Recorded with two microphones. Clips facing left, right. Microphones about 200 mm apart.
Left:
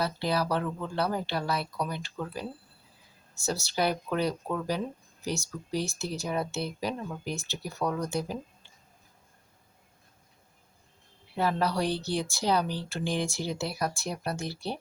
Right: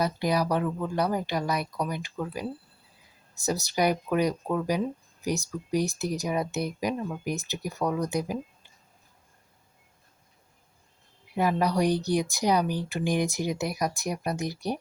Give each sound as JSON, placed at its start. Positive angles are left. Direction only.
{"t": 0.0, "sound": "speech", "side_deg": -15}
{"t": 11.6, "sound": "speech", "side_deg": -15}